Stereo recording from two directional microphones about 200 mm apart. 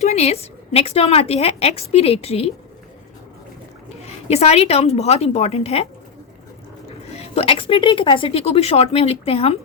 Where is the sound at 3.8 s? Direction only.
30° left (ahead or behind).